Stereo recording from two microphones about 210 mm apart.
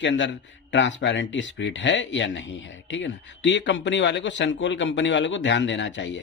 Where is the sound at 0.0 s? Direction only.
60° left (ahead or behind).